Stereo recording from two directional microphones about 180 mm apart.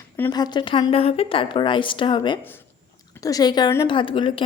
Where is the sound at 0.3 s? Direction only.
20° left (ahead or behind).